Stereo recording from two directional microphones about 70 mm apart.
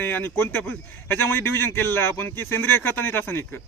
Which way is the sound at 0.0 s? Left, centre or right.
Left.